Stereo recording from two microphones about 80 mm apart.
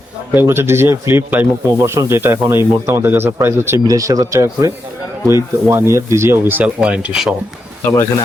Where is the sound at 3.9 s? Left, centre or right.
Right.